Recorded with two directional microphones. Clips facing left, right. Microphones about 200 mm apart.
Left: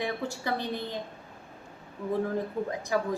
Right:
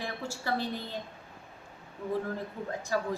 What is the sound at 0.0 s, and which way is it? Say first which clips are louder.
Speech: left 4 dB; 15° left (ahead or behind).